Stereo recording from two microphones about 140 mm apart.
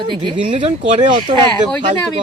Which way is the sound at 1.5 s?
5° left (ahead or behind).